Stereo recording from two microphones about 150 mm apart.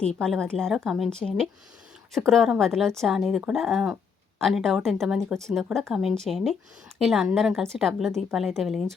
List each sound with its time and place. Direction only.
0.2 s speech: 5° left (ahead or behind)